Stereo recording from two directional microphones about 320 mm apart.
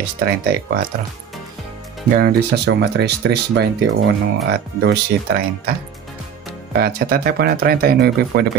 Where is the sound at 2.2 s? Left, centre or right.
Right.